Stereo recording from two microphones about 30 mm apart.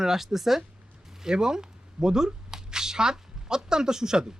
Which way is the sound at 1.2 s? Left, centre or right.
Right.